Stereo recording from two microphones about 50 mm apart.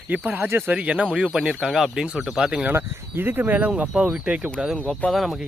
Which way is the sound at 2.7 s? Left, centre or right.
Right.